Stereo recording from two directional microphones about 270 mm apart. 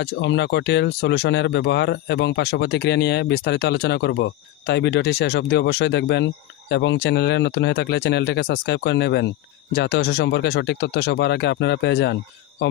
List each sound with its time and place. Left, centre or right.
0.0 s speech: left